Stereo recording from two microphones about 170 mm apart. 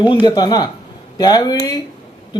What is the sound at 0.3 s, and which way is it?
A woman's voice, 25° left (ahead or behind).